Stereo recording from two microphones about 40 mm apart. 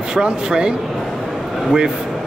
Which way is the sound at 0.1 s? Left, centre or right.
Right.